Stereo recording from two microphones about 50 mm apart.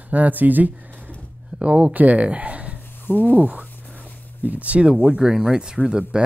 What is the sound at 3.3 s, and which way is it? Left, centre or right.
Speech, right.